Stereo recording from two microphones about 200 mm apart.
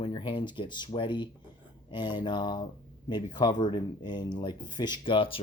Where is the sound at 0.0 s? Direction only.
25° left (ahead or behind).